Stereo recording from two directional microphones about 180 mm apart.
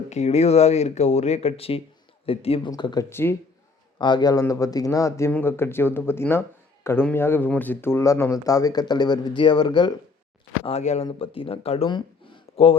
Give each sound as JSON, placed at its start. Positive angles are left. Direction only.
{"t": 0.1, "sound": "speech", "side_deg": 35}
{"t": 3.9, "sound": "speech", "side_deg": 25}
{"t": 10.6, "sound": "speech", "side_deg": 35}